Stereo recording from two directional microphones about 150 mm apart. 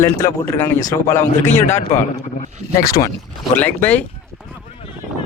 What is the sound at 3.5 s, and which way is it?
Speech, 10° left (ahead or behind).